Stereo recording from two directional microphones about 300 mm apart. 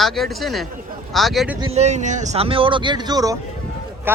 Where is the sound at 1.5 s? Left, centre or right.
Right.